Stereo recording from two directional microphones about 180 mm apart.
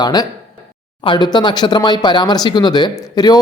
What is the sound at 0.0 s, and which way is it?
Speech, 20° left (ahead or behind).